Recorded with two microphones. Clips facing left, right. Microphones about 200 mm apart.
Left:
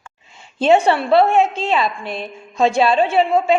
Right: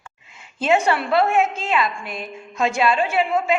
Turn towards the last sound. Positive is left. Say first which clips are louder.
# left 5 dB
turn(degrees=25)  # may be behind; listen again after turning